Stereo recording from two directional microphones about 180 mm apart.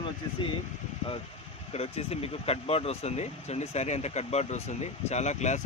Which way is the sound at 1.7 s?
35° left (ahead or behind).